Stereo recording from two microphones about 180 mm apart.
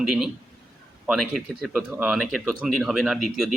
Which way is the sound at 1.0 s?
Centre (ahead or behind).